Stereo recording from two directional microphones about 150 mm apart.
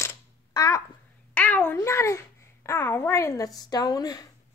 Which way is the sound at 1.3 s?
10° left (ahead or behind).